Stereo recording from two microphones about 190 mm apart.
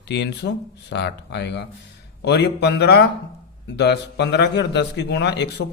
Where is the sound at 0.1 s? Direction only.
65° left (ahead or behind).